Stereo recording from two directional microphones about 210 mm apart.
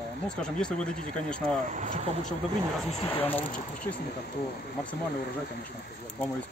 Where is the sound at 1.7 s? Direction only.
35° right (ahead or behind).